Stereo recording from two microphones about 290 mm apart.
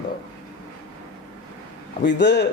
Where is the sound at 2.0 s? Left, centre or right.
Left.